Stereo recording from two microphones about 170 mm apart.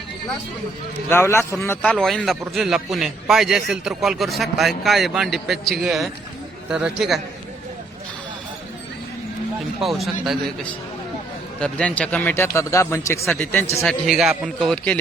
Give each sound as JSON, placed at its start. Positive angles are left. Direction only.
{"t": 1.1, "sound": "a man's voice", "side_deg": 15}
{"t": 9.8, "sound": "a man's voice", "side_deg": 0}
{"t": 13.8, "sound": "a man's voice", "side_deg": 0}